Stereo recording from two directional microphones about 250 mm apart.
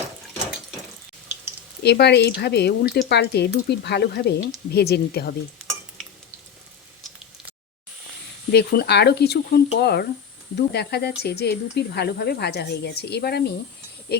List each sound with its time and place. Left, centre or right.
1.8 s speech: left
8.5 s speech: left